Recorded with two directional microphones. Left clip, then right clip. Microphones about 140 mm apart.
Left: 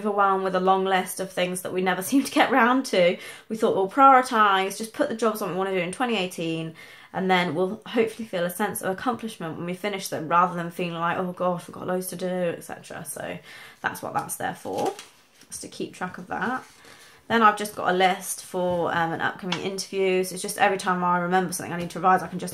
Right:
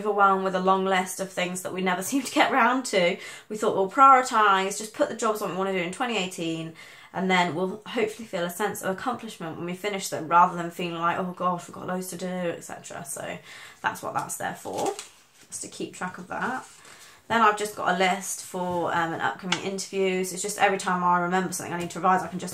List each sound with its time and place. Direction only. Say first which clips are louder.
0.0 s speech: right 1 dB; 30° left (ahead or behind)
14.5 s speech: left 2 dB; 30° left (ahead or behind)
16.0 s speech: left 1 dB; 35° left (ahead or behind)